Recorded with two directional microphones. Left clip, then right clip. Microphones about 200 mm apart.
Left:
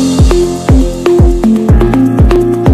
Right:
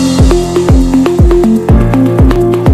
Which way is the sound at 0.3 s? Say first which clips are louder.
Right 1 dB; centre (ahead or behind).